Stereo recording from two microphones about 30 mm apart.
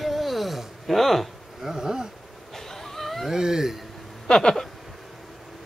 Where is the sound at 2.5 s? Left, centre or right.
Centre.